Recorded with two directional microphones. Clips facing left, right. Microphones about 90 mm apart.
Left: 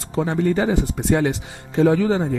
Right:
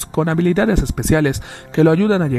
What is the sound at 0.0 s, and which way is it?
Speech, 80° right.